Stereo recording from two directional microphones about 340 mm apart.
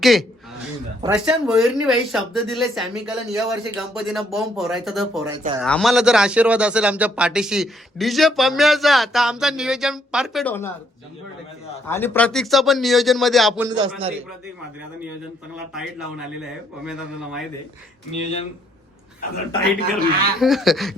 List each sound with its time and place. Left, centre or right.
0.0 s speech: centre
11.9 s speech: centre
13.7 s a man's voice: centre
15.5 s speech: centre
18.1 s speech: centre
20.1 s speech: right
20.4 s speech: centre